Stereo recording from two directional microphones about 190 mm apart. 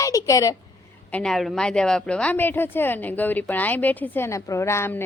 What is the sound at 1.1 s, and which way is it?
A woman's voice, 5° left (ahead or behind).